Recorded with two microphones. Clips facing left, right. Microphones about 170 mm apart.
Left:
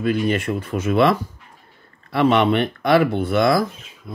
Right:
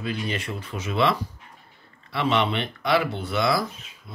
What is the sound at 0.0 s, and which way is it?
Speech, 50° left (ahead or behind).